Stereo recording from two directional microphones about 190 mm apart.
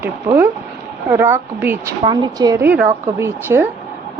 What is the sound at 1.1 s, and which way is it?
A woman's voice, 10° right (ahead or behind).